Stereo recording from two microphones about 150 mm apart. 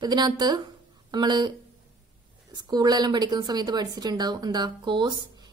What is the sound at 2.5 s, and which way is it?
A woman's voice, 25° right (ahead or behind).